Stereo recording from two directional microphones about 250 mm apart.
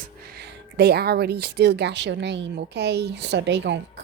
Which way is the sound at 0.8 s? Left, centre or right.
Right.